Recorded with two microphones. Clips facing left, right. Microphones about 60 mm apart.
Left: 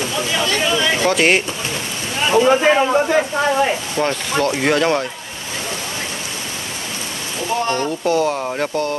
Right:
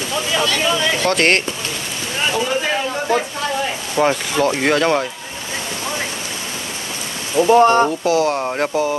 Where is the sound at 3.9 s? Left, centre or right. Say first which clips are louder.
Right 2 dB; centre.